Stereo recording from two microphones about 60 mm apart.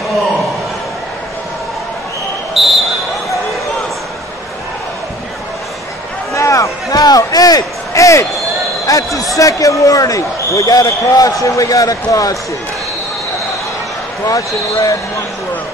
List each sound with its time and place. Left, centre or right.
2.6 s basketball bounce: centre
6.3 s a sound: left
8.8 s speech: left
14.2 s speech: left